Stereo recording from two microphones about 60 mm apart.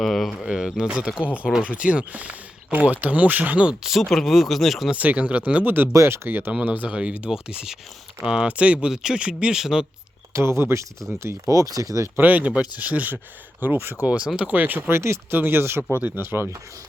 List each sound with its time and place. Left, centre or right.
0.0 s speech: centre
0.9 s speech: centre
3.8 s speech: centre
4.9 s speech: right
6.7 s speech: right
9.6 s speech: centre
10.6 s speech: right
12.1 s speech: right
15.3 s speech: right
16.0 s speech: right
16.2 s speech: right